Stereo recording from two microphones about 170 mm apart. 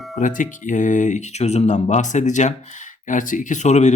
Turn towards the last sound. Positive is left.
turn(degrees=45)  # may be behind; listen again after turning